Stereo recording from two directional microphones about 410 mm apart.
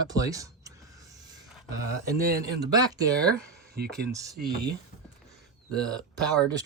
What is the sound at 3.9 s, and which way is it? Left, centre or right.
Speech, centre.